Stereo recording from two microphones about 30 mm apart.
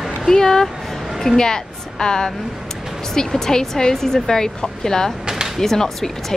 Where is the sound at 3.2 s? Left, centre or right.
Centre.